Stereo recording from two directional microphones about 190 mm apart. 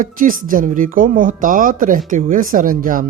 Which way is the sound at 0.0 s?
45° right (ahead or behind).